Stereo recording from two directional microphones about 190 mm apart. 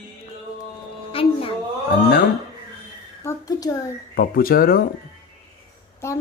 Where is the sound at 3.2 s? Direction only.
15° left (ahead or behind).